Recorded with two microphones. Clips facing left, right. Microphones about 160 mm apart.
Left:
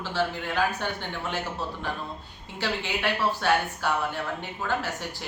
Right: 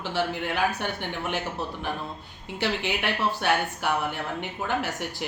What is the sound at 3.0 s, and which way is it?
Speech, 20° right (ahead or behind).